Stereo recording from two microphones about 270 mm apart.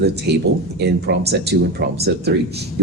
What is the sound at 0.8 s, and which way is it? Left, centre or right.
Speech, right.